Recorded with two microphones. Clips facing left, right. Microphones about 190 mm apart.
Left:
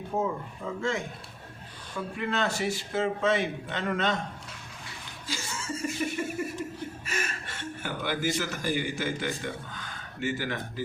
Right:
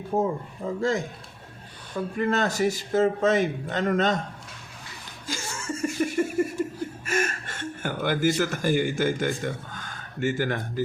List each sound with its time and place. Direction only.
0.2 s a man's voice: 35° right (ahead or behind)
2.1 s a man's voice: 40° right (ahead or behind)
5.2 s laughter: 50° right (ahead or behind)